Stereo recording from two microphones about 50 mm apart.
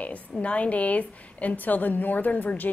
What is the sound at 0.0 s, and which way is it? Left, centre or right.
A woman's voice, left.